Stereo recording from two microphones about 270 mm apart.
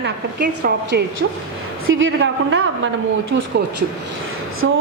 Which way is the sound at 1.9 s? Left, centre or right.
Right.